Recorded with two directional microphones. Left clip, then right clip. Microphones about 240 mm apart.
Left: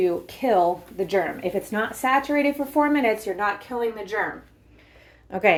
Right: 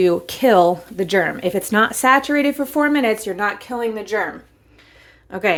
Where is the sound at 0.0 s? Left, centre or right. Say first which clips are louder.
Right 7 dB; right.